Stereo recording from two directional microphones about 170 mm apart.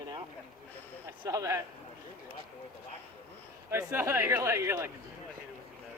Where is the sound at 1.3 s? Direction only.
20° right (ahead or behind).